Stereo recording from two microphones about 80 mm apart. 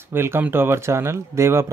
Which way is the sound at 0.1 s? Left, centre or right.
Right.